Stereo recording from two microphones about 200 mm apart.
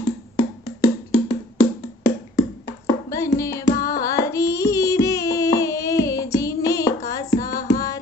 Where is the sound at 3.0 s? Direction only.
15° left (ahead or behind).